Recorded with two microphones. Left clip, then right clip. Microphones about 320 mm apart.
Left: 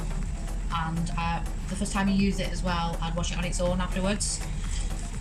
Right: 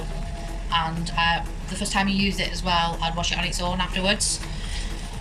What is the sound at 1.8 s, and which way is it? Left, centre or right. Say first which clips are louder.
A woman's voice: right 5 dB; centre.